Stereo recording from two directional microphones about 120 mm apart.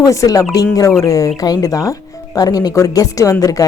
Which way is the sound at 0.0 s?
30° left (ahead or behind).